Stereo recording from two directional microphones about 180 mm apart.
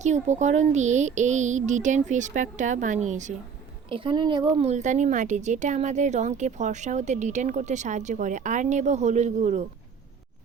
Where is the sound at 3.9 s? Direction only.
30° right (ahead or behind).